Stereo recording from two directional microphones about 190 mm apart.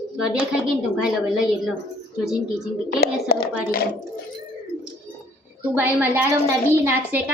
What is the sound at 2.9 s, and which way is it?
Speech, 50° left (ahead or behind).